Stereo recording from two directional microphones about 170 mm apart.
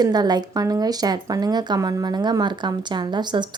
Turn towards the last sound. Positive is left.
turn(degrees=-25)  # may be behind; listen again after turning